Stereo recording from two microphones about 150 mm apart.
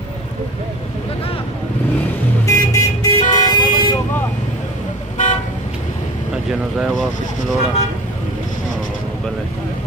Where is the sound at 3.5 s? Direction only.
30° left (ahead or behind).